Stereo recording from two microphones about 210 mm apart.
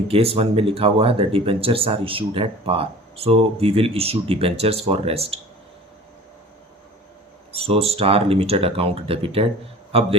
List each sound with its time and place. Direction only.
0.1 s speech: 25° right (ahead or behind)
7.5 s speech: 30° right (ahead or behind)